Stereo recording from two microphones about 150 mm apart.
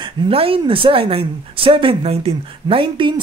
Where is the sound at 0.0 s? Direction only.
40° right (ahead or behind).